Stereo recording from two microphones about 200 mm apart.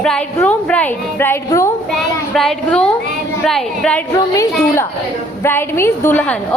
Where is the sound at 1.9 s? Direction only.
Centre (ahead or behind).